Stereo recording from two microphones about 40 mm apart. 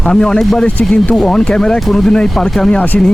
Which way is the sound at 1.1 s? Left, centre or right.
Centre.